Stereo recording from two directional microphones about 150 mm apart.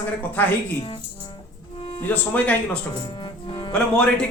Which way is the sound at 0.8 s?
30° left (ahead or behind).